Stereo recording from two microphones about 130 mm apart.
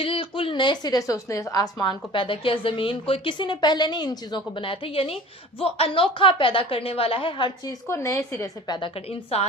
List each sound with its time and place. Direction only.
0.0 s a woman's voice: 40° left (ahead or behind)
9.0 s a woman's voice: 50° left (ahead or behind)